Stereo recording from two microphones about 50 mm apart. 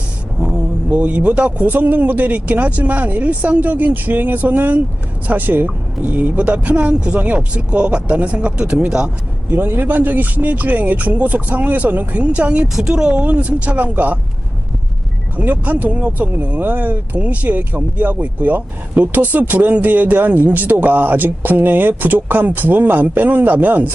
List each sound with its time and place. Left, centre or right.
0.3 s speech: right
9.5 s speech: right
12.6 s speech: centre
12.9 s speech: centre
15.4 s speech: right